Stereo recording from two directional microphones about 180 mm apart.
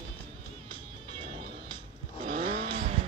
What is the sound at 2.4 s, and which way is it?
Vehicle, 30° right (ahead or behind).